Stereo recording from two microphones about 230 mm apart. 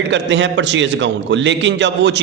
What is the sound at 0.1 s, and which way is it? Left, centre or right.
A man's voice, right.